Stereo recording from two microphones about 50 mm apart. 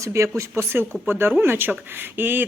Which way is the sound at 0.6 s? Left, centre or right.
Right.